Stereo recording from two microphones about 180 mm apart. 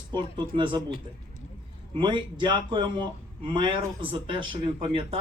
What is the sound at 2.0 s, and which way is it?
Speech, 25° right (ahead or behind).